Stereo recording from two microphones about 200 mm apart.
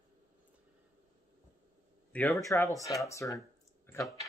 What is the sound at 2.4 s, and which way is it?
Speech, 15° left (ahead or behind).